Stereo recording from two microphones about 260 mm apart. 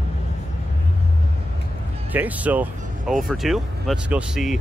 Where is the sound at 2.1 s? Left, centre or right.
Centre.